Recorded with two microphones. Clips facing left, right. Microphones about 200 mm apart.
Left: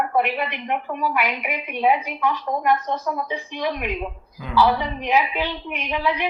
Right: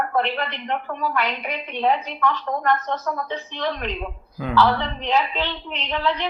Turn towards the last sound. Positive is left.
turn(degrees=15)  # may be behind; listen again after turning